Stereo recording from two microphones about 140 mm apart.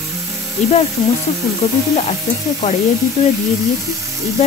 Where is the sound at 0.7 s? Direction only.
50° left (ahead or behind).